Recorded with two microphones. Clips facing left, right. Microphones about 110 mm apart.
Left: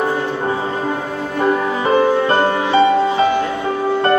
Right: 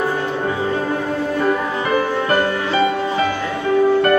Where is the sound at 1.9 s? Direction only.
30° left (ahead or behind).